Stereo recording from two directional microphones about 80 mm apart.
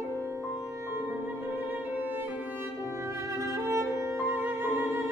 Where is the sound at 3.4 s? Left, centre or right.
Right.